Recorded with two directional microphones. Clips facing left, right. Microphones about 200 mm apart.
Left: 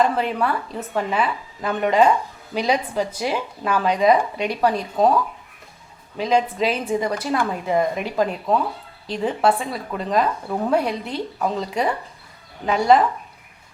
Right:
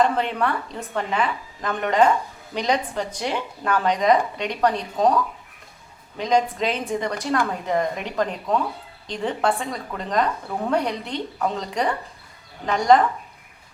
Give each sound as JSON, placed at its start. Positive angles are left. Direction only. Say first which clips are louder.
{"t": 0.0, "sound": "speech", "louder": "left 1 dB", "side_deg": 5}
{"t": 6.2, "sound": "speech", "louder": "left 1 dB", "side_deg": 5}